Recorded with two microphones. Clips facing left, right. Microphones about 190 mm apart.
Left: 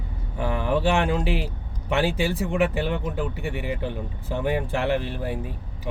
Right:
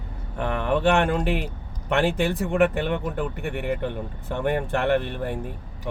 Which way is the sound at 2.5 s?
55° right (ahead or behind).